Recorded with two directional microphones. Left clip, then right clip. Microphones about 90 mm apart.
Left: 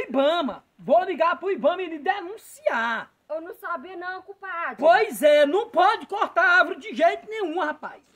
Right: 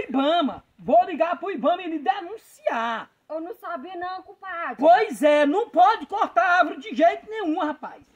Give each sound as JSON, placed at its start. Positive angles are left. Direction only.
{"t": 0.0, "sound": "a man's voice", "side_deg": 40}